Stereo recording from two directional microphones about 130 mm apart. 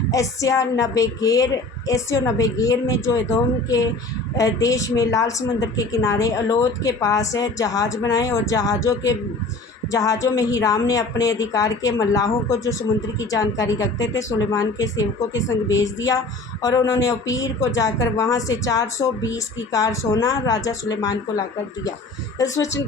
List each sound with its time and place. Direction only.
0.1 s a woman's voice: 25° left (ahead or behind)